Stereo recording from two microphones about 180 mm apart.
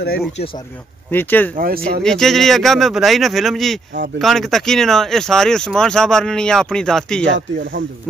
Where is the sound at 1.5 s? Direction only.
55° right (ahead or behind).